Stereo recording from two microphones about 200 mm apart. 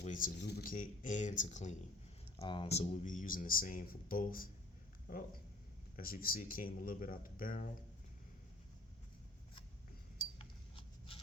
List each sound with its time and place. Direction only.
0.0 s speech: 40° left (ahead or behind)
2.4 s speech: 25° left (ahead or behind); by 7.7 s 45° left (ahead or behind)
10.3 s a sound: 30° left (ahead or behind)